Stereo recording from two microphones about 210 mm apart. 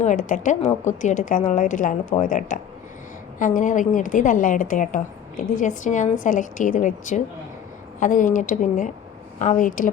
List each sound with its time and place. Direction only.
0.0 s a woman's voice: 35° left (ahead or behind)